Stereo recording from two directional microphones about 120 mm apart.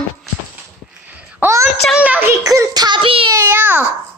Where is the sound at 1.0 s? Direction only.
15° right (ahead or behind).